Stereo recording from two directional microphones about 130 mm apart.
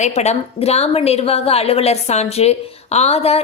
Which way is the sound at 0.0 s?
60° left (ahead or behind).